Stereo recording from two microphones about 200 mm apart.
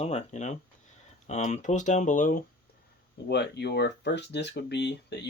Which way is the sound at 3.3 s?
55° left (ahead or behind).